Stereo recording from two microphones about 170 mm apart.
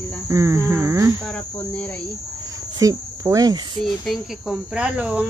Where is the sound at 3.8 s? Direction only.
Centre (ahead or behind).